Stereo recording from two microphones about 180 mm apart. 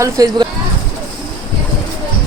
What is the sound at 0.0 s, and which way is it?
Speech, 20° right (ahead or behind).